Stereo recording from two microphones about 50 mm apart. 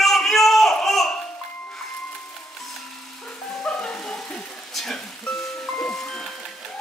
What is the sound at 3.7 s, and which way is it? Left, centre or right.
Music, centre.